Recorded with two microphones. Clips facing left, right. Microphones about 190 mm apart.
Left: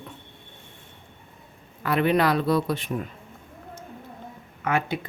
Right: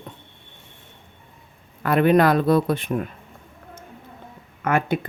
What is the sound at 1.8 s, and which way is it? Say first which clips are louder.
Speech: right 5 dB; 50° right (ahead or behind).